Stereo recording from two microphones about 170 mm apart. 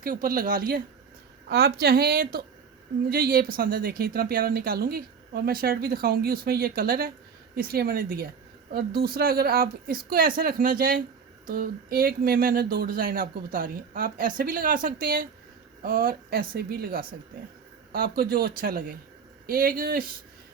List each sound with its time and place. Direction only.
0.0 s speech: 55° right (ahead or behind)
1.5 s speech: 70° right (ahead or behind)